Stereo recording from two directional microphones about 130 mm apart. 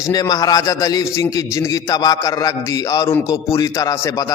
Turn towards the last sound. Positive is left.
turn(degrees=30)  # may be behind; listen again after turning